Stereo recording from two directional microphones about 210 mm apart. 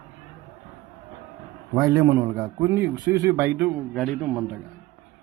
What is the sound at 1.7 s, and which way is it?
A man's voice, 15° right (ahead or behind).